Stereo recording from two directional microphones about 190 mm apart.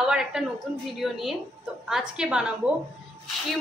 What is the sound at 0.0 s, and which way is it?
A woman's voice, 5° right (ahead or behind).